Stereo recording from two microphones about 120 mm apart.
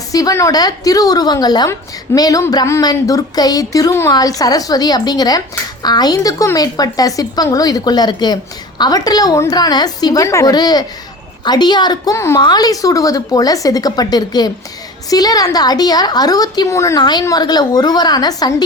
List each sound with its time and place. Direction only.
0.1 s a woman's voice: 30° left (ahead or behind)
12.1 s a woman's voice: 20° left (ahead or behind)
12.4 s a woman's voice: 35° left (ahead or behind)